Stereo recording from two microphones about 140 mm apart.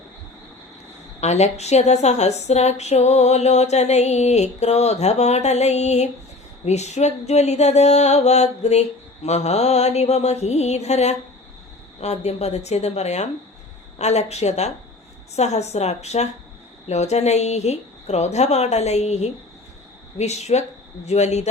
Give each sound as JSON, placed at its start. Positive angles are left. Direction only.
{"t": 1.2, "sound": "a woman's voice", "side_deg": 55}